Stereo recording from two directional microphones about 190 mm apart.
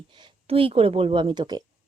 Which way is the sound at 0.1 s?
25° right (ahead or behind).